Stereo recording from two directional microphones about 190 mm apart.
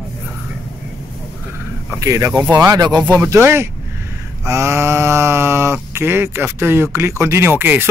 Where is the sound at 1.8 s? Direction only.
15° right (ahead or behind).